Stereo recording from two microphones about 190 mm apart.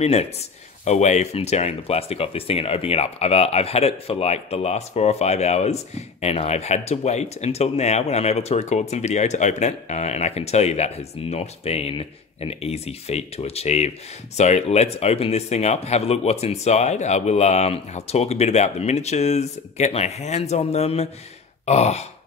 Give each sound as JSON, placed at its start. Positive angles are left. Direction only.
{"t": 0.0, "sound": "speech", "side_deg": 35}